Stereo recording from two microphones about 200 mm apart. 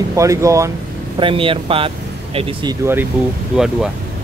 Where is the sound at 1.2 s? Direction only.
25° right (ahead or behind).